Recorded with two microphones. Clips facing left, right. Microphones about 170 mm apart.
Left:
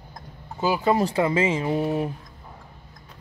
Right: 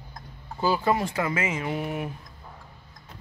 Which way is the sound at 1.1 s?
30° left (ahead or behind).